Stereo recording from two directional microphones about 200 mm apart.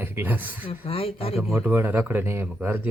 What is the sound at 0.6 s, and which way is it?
Speech, 25° left (ahead or behind).